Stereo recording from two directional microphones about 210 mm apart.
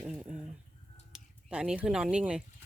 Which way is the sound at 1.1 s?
5° right (ahead or behind).